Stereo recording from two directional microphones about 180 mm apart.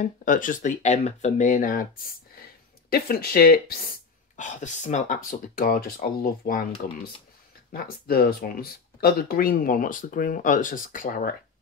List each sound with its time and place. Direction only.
0.0 s speech: 45° left (ahead or behind)
2.9 s speech: 60° left (ahead or behind)
4.4 s speech: 40° left (ahead or behind)